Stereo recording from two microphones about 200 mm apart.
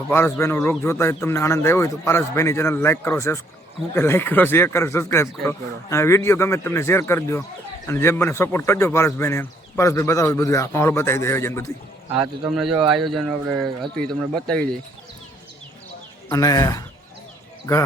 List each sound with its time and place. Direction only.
0.1 s speech: 10° left (ahead or behind)
12.1 s speech: 5° right (ahead or behind)
16.3 s speech: 20° left (ahead or behind)